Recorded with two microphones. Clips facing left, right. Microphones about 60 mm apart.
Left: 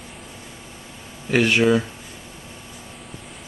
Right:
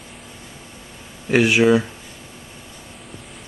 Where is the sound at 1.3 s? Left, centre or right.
Centre.